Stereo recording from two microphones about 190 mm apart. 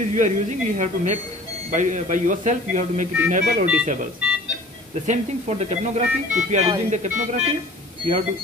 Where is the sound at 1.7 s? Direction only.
40° right (ahead or behind).